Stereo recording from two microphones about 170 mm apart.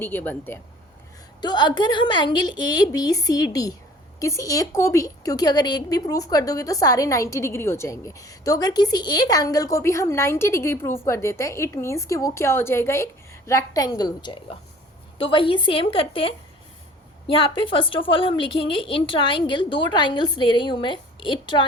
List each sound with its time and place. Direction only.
0.0 s speech: 10° left (ahead or behind)
1.4 s a woman's voice: 25° left (ahead or behind)